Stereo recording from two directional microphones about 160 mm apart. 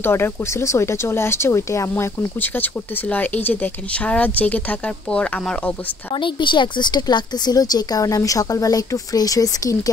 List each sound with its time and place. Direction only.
0.0 s speech: 15° left (ahead or behind)
6.1 s a woman's voice: 30° left (ahead or behind)